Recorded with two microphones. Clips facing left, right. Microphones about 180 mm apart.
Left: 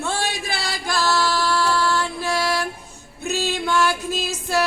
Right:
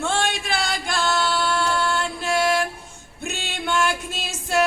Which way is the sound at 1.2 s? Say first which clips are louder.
Left 1 dB; 25° right (ahead or behind).